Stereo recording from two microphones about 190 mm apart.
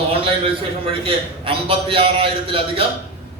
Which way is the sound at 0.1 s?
30° right (ahead or behind).